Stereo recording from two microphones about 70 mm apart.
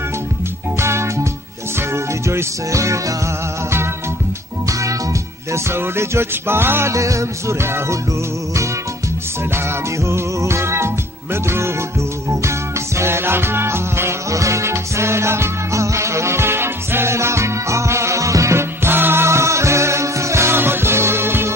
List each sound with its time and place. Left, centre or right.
0.7 s music: right
5.5 s music: right
6.9 s music: right
10.0 s music: right
12.3 s music: right